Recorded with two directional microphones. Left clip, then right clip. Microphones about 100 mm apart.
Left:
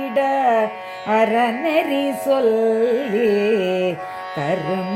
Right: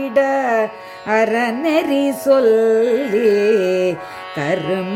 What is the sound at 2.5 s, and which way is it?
Carnatic music, 45° right (ahead or behind).